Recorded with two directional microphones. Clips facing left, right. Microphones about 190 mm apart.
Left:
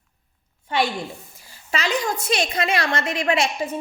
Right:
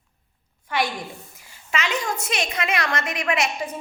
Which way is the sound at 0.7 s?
25° left (ahead or behind).